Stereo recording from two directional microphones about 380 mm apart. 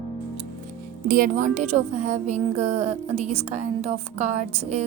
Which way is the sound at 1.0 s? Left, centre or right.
Right.